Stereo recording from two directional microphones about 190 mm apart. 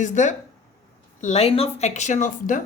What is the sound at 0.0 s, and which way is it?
Speech, 40° left (ahead or behind).